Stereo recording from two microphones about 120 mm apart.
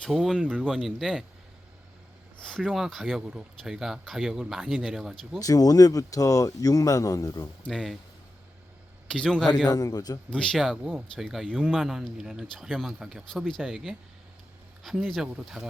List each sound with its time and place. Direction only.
0.0 s speech: centre (ahead or behind)
2.4 s speech: 5° left (ahead or behind)
5.4 s speech: 30° left (ahead or behind)
7.7 s speech: centre (ahead or behind)
9.0 s a man's voice: 5° left (ahead or behind)
9.6 s a man's voice: 30° left (ahead or behind)
10.2 s speech: 10° left (ahead or behind)